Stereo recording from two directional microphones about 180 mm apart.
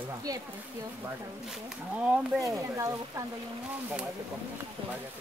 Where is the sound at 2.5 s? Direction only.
15° right (ahead or behind).